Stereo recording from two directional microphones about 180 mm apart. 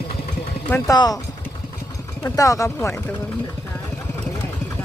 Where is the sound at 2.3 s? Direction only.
20° left (ahead or behind).